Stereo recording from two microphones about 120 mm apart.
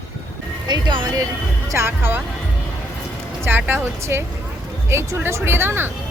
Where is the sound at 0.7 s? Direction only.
40° right (ahead or behind).